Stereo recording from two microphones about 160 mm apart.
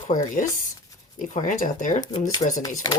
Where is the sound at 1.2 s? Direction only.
55° left (ahead or behind).